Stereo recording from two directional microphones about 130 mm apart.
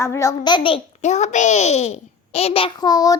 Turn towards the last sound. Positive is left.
turn(degrees=30)  # may be behind; listen again after turning